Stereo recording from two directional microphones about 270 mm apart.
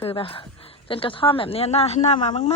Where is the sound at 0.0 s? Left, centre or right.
Left.